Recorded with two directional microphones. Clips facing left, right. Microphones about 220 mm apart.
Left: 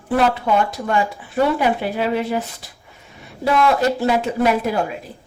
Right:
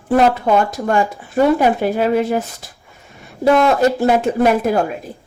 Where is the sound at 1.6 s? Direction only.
45° right (ahead or behind).